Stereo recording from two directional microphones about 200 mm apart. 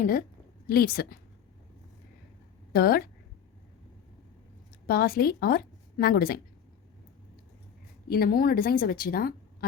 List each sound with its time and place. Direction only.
0.0 s speech: 45° left (ahead or behind)
2.7 s speech: 50° left (ahead or behind)
4.9 s a woman's voice: 50° left (ahead or behind)
8.1 s speech: 50° left (ahead or behind)